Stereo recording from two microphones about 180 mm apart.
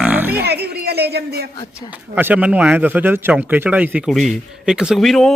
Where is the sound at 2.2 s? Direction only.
10° right (ahead or behind).